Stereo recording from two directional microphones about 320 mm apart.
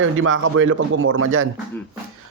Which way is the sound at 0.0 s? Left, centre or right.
Right.